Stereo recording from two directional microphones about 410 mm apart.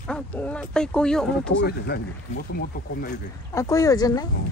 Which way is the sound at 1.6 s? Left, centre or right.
Left.